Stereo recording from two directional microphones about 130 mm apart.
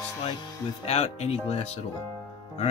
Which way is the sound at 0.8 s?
55° left (ahead or behind).